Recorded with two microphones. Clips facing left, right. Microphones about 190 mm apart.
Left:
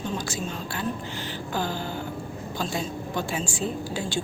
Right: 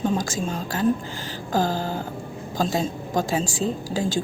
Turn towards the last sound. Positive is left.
turn(degrees=-35)  # may be behind; listen again after turning